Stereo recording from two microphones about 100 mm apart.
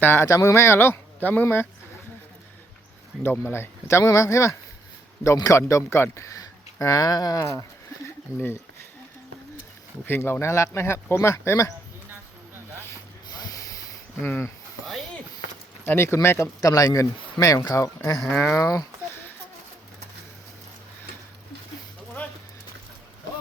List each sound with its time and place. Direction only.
0.0 s speech: 25° left (ahead or behind)
3.2 s speech: 25° left (ahead or behind)
8.0 s a sound: 25° left (ahead or behind)
10.1 s speech: 20° left (ahead or behind)
13.2 s a sound: 40° left (ahead or behind)
14.3 s speech: 25° left (ahead or behind)
15.8 s speech: 25° left (ahead or behind)
18.2 s speech: 5° left (ahead or behind)
18.5 s speech: 35° left (ahead or behind)